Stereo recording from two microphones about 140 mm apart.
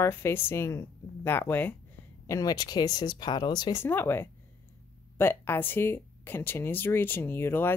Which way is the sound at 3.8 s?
15° left (ahead or behind).